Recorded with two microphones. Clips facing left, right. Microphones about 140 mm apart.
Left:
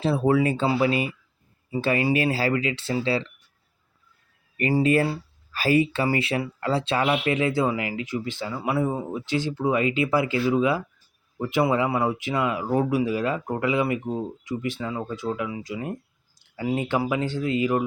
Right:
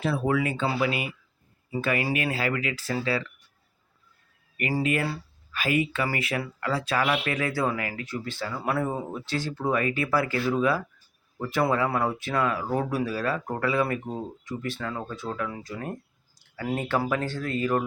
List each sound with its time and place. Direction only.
0.0 s speech: 30° left (ahead or behind)
4.5 s speech: 30° left (ahead or behind)